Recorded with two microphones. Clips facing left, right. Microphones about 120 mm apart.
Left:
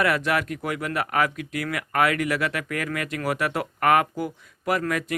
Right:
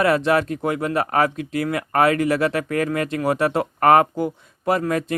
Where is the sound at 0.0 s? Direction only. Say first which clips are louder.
Right 5 dB; 30° right (ahead or behind).